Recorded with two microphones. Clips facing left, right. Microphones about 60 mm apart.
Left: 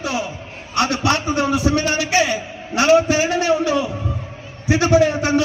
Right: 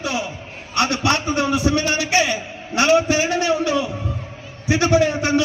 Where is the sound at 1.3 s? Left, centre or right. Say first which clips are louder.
Left 1 dB; left.